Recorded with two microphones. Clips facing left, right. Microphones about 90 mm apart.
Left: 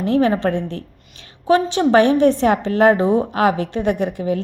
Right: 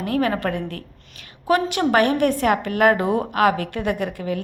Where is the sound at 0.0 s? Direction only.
25° left (ahead or behind).